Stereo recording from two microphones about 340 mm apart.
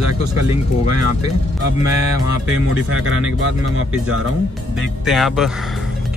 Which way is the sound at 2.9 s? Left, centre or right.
Right.